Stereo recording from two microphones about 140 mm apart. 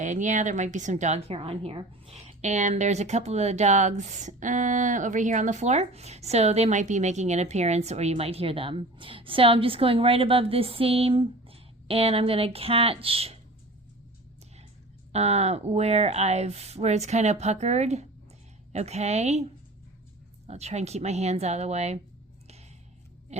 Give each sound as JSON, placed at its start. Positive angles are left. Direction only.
{"t": 0.0, "sound": "speech", "side_deg": -60}
{"t": 15.1, "sound": "speech", "side_deg": -50}
{"t": 20.5, "sound": "speech", "side_deg": -50}
{"t": 23.3, "sound": "a sound", "side_deg": -50}